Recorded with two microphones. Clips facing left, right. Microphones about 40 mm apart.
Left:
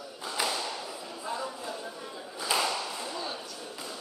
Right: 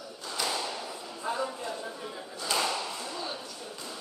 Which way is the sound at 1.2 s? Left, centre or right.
Centre.